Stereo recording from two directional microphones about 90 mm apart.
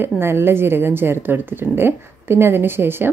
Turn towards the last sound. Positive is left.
turn(degrees=-25)  # may be behind; listen again after turning